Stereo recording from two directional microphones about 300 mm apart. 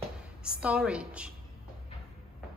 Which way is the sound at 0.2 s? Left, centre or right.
Centre.